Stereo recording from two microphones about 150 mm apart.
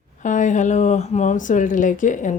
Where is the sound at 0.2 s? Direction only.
55° left (ahead or behind).